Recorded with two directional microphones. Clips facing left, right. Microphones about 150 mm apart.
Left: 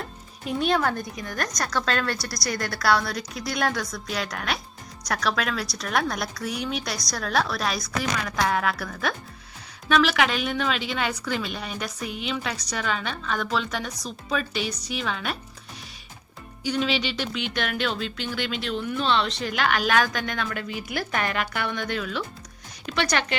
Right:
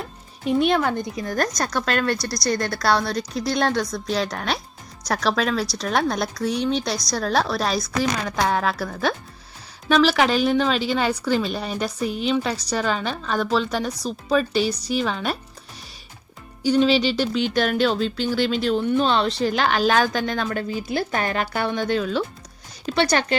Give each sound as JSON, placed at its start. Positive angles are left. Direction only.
{"t": 0.0, "sound": "music", "side_deg": 0}
{"t": 1.2, "sound": "speech", "side_deg": -35}
{"t": 1.8, "sound": "speech", "side_deg": -15}
{"t": 16.6, "sound": "speech", "side_deg": -35}